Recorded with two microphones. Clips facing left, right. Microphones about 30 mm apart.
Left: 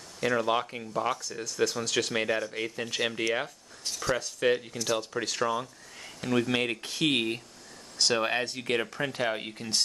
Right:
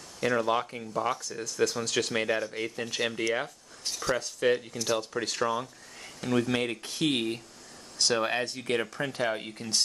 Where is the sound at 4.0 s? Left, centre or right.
Centre.